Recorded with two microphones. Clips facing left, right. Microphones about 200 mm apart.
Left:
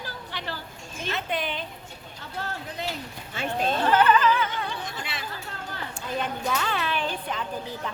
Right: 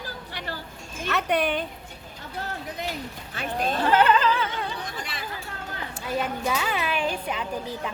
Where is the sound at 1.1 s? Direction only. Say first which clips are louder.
Right 6 dB; 65° right (ahead or behind).